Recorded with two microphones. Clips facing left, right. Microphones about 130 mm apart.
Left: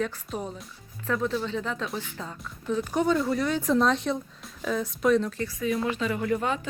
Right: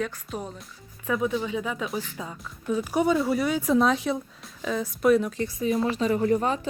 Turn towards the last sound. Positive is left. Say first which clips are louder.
# right 4 dB
turn(degrees=-35)  # may be behind; listen again after turning